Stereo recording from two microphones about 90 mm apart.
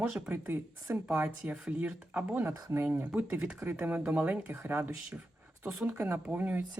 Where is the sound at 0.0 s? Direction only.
20° right (ahead or behind).